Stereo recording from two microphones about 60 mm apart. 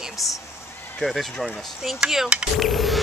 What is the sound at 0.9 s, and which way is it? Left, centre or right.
Speech, centre.